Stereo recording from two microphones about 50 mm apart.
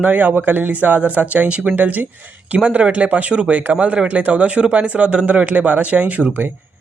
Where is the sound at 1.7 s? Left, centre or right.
Right.